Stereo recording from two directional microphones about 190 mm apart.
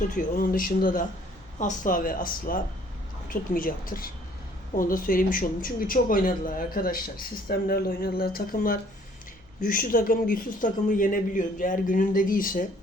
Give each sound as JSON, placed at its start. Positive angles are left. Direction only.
{"t": 0.1, "sound": "speech", "side_deg": 45}